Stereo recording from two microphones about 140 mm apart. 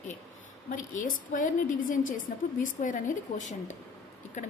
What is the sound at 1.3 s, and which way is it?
A woman's voice, 70° left (ahead or behind).